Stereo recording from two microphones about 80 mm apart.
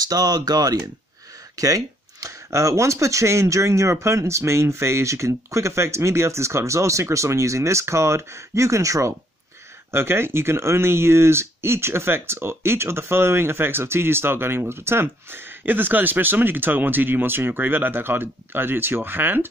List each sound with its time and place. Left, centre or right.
0.1 s speech: right